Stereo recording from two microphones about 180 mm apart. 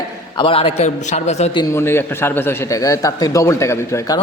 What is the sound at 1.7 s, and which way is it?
A man's voice, 15° left (ahead or behind).